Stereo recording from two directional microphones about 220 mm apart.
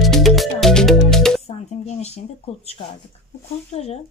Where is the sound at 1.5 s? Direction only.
30° left (ahead or behind).